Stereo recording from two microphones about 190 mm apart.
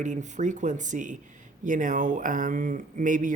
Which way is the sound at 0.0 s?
40° right (ahead or behind).